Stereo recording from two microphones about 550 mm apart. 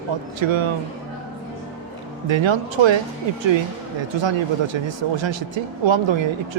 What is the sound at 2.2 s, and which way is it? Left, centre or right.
Speech, right.